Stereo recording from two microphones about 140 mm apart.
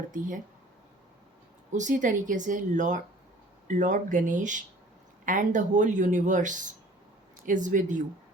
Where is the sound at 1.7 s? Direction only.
65° right (ahead or behind).